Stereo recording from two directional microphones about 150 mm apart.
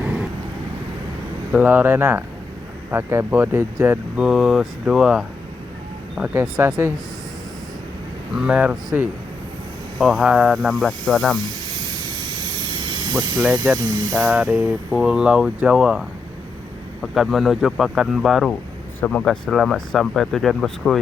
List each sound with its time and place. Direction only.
0.0 s vehicle: 5° right (ahead or behind)
1.5 s speech: 10° right (ahead or behind)
3.8 s speech: 5° right (ahead or behind)
8.4 s speech: 5° right (ahead or behind)
10.0 s speech: centre (ahead or behind)
13.1 s speech: 25° right (ahead or behind)
14.2 s speech: 5° right (ahead or behind)
18.9 s speech: 10° left (ahead or behind)